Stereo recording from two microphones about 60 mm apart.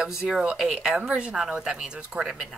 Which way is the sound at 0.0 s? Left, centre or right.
Centre.